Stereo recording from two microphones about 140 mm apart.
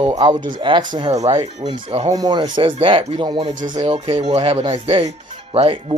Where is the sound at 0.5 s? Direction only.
35° right (ahead or behind).